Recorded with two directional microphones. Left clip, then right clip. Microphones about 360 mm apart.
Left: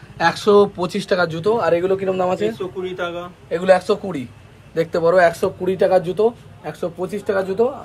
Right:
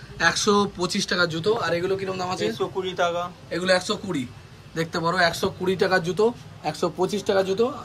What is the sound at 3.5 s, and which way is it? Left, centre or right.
Speech, centre.